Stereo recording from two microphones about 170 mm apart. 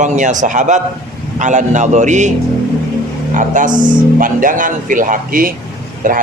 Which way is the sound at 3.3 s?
50° right (ahead or behind).